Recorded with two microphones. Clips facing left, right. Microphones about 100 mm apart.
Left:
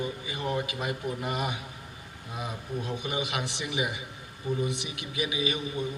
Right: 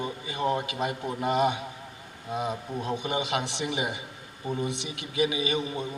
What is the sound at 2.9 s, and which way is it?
A man's voice, 30° right (ahead or behind).